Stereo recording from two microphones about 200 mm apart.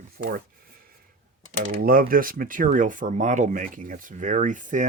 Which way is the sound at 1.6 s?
45° right (ahead or behind).